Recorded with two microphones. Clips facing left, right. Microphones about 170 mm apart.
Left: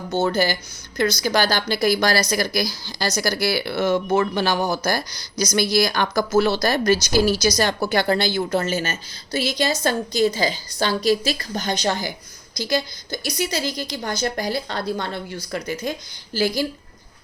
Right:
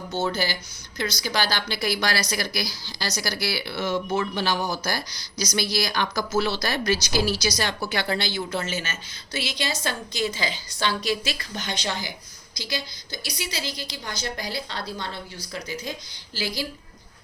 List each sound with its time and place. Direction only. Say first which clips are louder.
0.1 s speech: left 6 dB; 50° left (ahead or behind)